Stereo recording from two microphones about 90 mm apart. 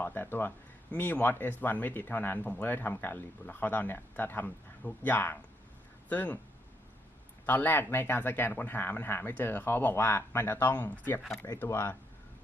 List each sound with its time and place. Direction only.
0.0 s speech: 20° left (ahead or behind)
7.4 s speech: 20° left (ahead or behind)